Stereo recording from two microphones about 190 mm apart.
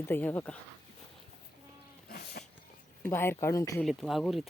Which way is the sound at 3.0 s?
10° left (ahead or behind).